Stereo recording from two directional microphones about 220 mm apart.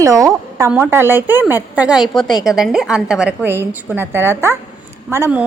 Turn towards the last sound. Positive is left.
turn(degrees=-10)  # may be behind; listen again after turning